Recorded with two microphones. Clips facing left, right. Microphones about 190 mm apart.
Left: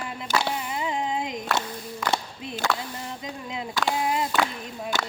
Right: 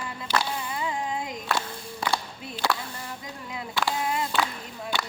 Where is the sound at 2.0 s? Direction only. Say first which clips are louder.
Left 1 dB; 30° right (ahead or behind).